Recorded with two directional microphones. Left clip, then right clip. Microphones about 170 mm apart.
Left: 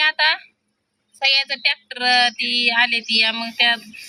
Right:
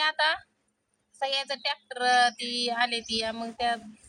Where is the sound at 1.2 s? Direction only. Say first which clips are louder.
Left 11 dB; 15° right (ahead or behind).